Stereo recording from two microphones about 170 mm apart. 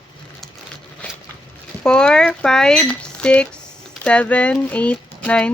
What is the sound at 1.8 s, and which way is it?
Speech, 5° left (ahead or behind).